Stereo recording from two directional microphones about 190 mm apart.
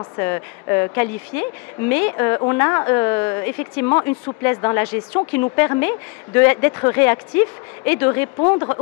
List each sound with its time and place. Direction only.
0.0 s a woman's voice: 15° left (ahead or behind)